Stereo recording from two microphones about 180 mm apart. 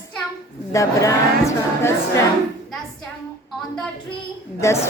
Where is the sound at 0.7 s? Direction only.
20° left (ahead or behind).